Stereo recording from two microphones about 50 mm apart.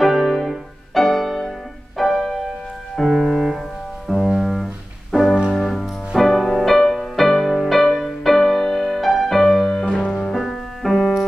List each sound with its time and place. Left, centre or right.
0.0 s music: centre
4.1 s double bass: centre
5.1 s music: centre